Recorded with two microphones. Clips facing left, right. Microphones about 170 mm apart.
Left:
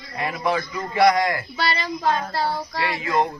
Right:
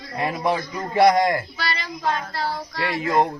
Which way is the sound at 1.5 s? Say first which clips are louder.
Left 4 dB; 25° left (ahead or behind).